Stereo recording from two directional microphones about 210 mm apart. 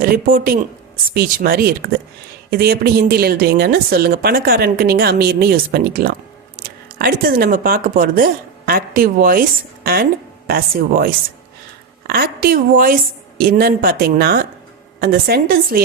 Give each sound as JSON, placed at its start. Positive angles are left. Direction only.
{"t": 0.0, "sound": "a woman's voice", "side_deg": -45}